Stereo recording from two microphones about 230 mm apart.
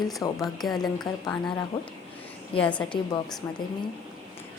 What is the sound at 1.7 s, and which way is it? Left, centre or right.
Speech, left.